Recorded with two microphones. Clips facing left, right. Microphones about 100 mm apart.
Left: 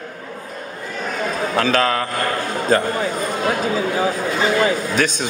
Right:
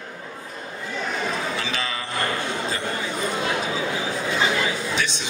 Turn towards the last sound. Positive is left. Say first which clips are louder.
# left 6 dB
turn(degrees=45)  # may be behind; listen again after turning